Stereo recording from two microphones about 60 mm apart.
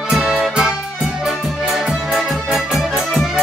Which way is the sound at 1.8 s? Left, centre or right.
Centre.